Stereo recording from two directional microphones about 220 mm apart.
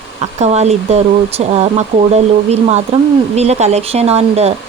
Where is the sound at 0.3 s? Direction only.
30° right (ahead or behind).